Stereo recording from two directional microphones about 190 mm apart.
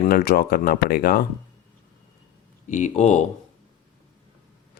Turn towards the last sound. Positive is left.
turn(degrees=35)  # may be behind; listen again after turning